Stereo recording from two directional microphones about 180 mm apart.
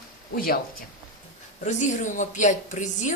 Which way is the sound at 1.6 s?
45° left (ahead or behind).